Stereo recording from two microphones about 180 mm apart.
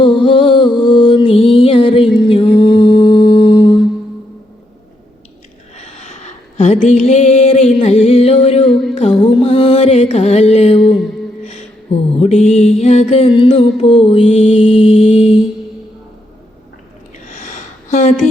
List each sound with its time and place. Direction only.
0.0 s music: 25° left (ahead or behind)
2.2 s mantra: 25° left (ahead or behind)
5.7 s a sound: 40° left (ahead or behind)
6.9 s music: 40° left (ahead or behind)
8.7 s music: centre (ahead or behind)
9.3 s mantra: 30° left (ahead or behind)
11.4 s a sound: 35° left (ahead or behind)
12.8 s mantra: 35° left (ahead or behind)
15.0 s music: 35° left (ahead or behind)
17.3 s a sound: 40° left (ahead or behind)